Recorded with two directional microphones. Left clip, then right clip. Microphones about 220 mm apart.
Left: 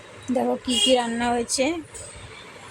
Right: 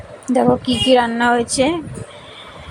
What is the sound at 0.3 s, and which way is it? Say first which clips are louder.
Speech: right 8 dB; 15° right (ahead or behind).